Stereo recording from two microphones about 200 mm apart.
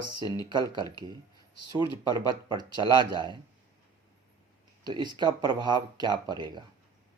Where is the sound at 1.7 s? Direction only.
20° right (ahead or behind).